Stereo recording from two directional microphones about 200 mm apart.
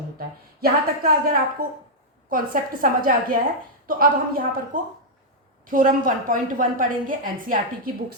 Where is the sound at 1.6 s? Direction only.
50° right (ahead or behind).